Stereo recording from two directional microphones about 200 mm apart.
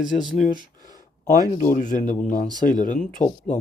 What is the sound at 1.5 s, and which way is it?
Speech, 40° left (ahead or behind).